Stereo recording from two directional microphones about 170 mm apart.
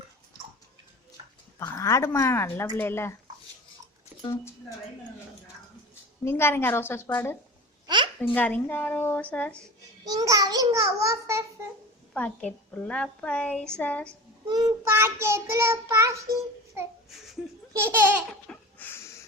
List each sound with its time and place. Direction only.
1.5 s a woman's voice: 20° left (ahead or behind)
5.9 s a woman's voice: 15° left (ahead or behind)
7.9 s a sound: 25° right (ahead or behind)
8.2 s a woman's voice: 10° left (ahead or behind)
10.1 s a child's voice: 20° right (ahead or behind)
12.1 s a woman's voice: 5° left (ahead or behind)
14.4 s child singing: 25° right (ahead or behind)
17.8 s child singing: 10° right (ahead or behind)
18.3 s chuckle: 5° left (ahead or behind)